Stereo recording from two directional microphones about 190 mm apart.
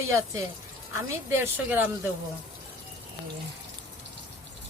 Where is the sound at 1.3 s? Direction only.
10° right (ahead or behind).